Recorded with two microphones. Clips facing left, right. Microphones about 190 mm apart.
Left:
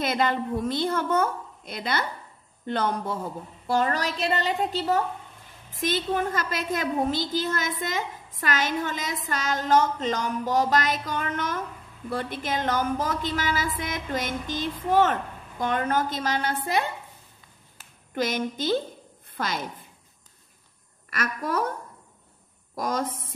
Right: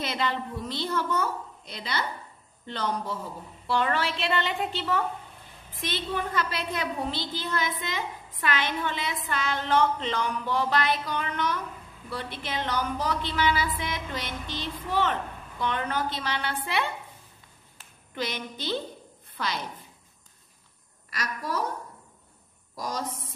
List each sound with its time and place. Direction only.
0.0 s a woman's voice: 50° left (ahead or behind)
18.1 s a woman's voice: 45° left (ahead or behind)
21.1 s a woman's voice: 55° left (ahead or behind)
22.8 s a woman's voice: 55° left (ahead or behind)